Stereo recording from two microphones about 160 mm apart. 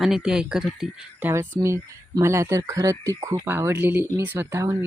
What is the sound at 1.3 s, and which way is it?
Speech, 15° right (ahead or behind).